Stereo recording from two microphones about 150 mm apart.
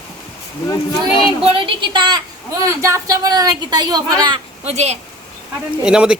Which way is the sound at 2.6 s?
20° right (ahead or behind).